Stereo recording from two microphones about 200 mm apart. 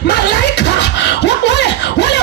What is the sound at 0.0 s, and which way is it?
Beatboxing, 55° left (ahead or behind).